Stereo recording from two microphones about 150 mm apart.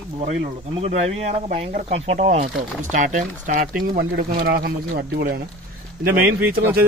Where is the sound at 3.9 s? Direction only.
85° right.